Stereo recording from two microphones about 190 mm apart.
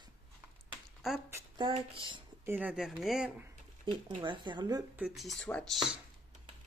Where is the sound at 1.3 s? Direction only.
15° right (ahead or behind).